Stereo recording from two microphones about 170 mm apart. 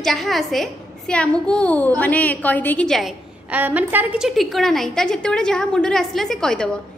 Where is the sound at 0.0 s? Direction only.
Centre (ahead or behind).